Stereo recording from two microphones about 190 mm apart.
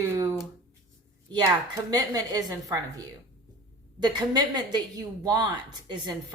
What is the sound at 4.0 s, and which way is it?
Speech, 20° right (ahead or behind).